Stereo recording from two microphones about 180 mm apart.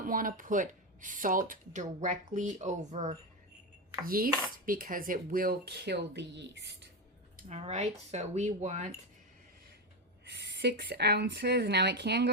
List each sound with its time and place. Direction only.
0.0 s speech: 50° right (ahead or behind)
4.0 s speech: 55° right (ahead or behind); by 6.8 s 75° right (ahead or behind)
7.4 s speech: 35° right (ahead or behind)
10.2 s speech: 70° right (ahead or behind)